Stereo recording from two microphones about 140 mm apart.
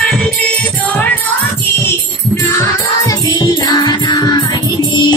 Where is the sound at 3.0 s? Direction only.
25° left (ahead or behind).